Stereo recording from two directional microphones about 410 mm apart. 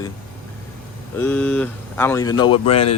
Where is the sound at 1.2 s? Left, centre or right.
Centre.